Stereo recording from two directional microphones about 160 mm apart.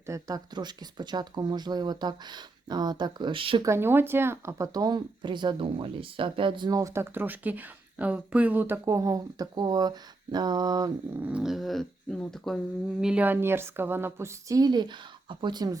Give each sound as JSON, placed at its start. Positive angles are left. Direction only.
{"t": 0.0, "sound": "speech", "side_deg": -20}
{"t": 3.6, "sound": "speech", "side_deg": -15}
{"t": 11.2, "sound": "speech", "side_deg": -5}
{"t": 13.0, "sound": "a woman's voice", "side_deg": -5}